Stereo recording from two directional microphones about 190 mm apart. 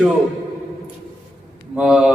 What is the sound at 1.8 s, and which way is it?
Speech, 5° right (ahead or behind).